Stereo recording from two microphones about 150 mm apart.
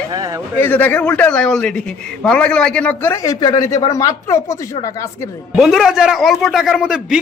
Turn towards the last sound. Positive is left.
turn(degrees=-5)  # may be behind; listen again after turning